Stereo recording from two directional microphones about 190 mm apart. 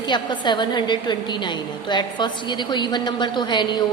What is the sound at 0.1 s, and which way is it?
A woman's voice, 25° left (ahead or behind).